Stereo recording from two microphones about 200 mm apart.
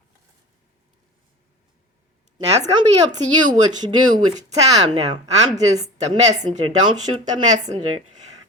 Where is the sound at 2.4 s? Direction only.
30° right (ahead or behind).